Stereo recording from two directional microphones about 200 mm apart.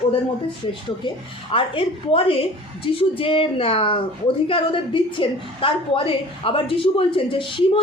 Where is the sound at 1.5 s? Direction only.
25° left (ahead or behind).